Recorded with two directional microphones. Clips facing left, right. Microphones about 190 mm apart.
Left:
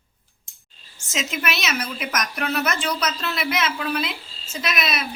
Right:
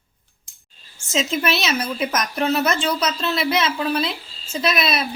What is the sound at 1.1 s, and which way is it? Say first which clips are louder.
A woman's voice: right 6 dB; 30° right (ahead or behind).